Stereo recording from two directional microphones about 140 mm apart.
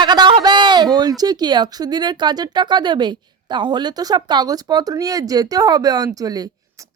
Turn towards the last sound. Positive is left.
turn(degrees=-25)  # may be behind; listen again after turning